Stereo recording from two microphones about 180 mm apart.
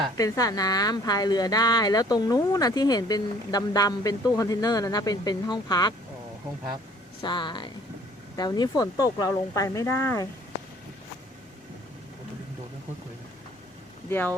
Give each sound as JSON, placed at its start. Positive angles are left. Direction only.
{"t": 0.2, "sound": "speech", "side_deg": 20}
{"t": 7.2, "sound": "speech", "side_deg": 25}
{"t": 14.1, "sound": "speech", "side_deg": 10}